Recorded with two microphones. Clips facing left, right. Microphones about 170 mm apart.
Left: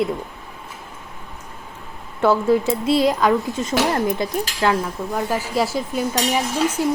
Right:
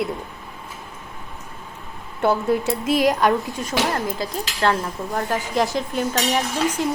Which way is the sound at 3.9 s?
20° left (ahead or behind).